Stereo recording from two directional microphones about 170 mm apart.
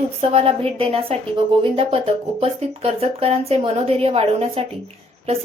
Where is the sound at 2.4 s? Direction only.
35° right (ahead or behind).